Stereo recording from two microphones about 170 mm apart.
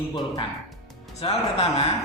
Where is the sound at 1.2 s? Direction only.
35° left (ahead or behind).